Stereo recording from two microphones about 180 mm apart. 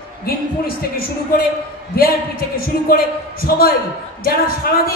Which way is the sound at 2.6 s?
55° left (ahead or behind).